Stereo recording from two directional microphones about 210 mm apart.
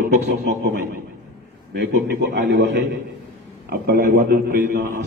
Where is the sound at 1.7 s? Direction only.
45° right (ahead or behind).